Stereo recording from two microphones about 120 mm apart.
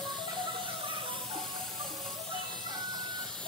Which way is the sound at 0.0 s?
40° right (ahead or behind).